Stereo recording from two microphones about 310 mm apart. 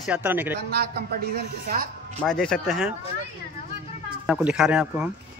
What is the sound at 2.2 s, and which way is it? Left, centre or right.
Speech, centre.